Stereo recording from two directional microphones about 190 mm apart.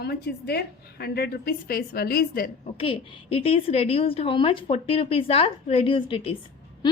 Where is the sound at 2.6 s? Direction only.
30° left (ahead or behind).